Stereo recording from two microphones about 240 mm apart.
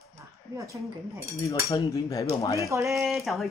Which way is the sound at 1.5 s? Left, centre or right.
Centre.